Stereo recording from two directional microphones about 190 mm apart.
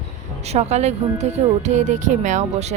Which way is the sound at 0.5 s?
35° right (ahead or behind).